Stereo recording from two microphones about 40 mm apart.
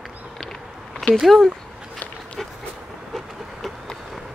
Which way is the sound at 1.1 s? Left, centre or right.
Centre.